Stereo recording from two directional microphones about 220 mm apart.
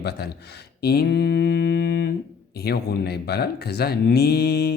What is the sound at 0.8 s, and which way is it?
Mantra, 45° left (ahead or behind).